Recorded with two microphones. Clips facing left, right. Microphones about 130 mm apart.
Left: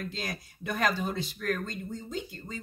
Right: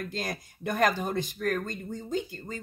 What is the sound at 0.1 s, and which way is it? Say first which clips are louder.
Speech: right 3 dB; 50° right (ahead or behind).